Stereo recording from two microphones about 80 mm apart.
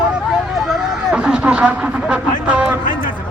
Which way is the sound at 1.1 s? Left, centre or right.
Centre.